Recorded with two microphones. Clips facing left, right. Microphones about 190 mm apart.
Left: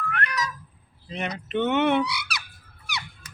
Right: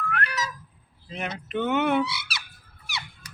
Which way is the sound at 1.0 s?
Centre (ahead or behind).